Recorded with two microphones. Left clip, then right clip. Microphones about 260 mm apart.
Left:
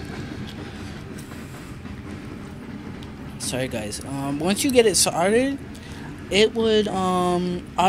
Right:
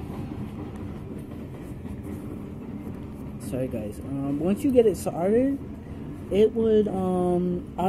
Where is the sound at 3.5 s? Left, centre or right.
Centre.